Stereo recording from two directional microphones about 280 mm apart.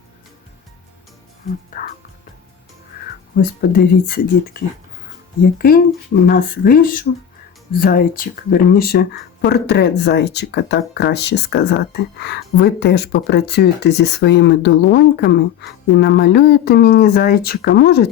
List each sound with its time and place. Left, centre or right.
3.0 s music: left
3.3 s speech: left